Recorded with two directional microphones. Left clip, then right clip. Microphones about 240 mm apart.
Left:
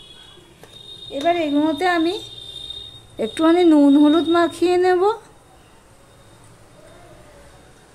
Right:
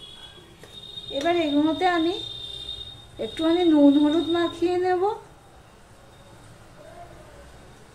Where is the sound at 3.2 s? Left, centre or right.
Left.